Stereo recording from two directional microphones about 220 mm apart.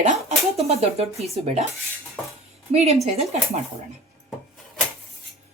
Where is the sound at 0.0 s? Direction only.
30° right (ahead or behind).